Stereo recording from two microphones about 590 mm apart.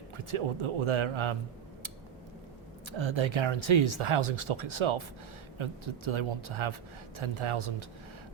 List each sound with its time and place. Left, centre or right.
0.3 s speech: right
3.0 s speech: right